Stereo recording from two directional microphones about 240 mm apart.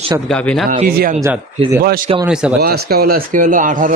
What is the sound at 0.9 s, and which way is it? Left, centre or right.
Speech, right.